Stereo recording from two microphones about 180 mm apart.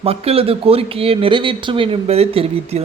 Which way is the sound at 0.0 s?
35° right (ahead or behind).